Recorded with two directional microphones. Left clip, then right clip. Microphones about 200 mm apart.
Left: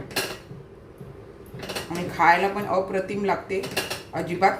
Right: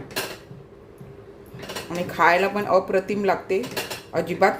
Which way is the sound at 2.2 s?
55° right (ahead or behind).